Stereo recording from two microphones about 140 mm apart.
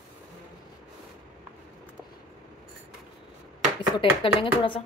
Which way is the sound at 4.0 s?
40° left (ahead or behind).